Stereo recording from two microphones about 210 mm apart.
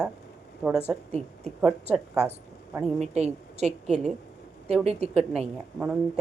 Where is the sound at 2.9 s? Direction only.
30° right (ahead or behind).